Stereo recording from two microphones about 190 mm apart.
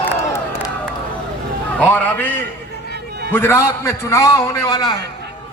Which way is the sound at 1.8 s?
10° left (ahead or behind).